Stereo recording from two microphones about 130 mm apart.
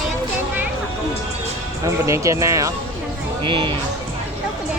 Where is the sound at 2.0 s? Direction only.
25° right (ahead or behind).